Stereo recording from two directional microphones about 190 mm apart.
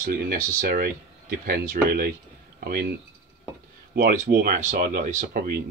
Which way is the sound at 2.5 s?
55° right (ahead or behind).